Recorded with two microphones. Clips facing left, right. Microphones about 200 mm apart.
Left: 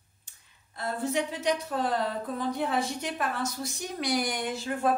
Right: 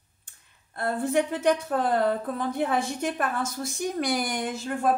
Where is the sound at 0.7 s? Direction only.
55° right (ahead or behind).